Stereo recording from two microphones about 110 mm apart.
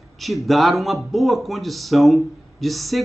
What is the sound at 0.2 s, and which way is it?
A man's voice, centre (ahead or behind).